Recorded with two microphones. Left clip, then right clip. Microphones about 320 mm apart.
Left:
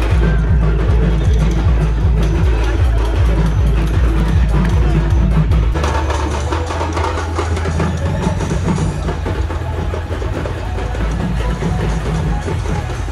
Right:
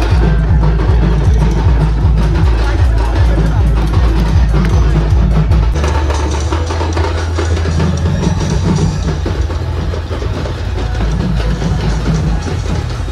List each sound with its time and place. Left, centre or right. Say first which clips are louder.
7.7 s music: right 2 dB; left